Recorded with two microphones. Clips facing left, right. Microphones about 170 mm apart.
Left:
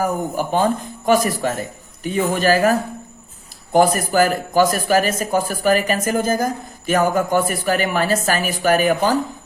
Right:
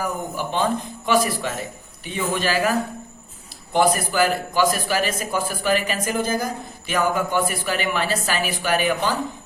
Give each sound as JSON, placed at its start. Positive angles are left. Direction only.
{"t": 0.0, "sound": "speech", "side_deg": 45}